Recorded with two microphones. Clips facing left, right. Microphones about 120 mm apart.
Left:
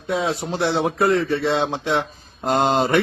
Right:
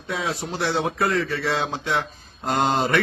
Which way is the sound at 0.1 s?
25° left (ahead or behind).